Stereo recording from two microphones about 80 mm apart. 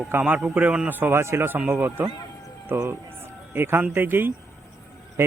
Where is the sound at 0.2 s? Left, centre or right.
Centre.